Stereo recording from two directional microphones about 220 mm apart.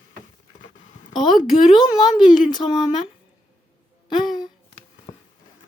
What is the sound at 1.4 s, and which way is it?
Speech, 20° left (ahead or behind).